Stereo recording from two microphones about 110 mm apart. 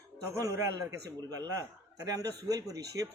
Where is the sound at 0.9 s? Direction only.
35° right (ahead or behind).